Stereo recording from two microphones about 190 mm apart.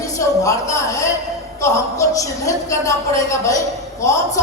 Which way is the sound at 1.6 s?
15° left (ahead or behind).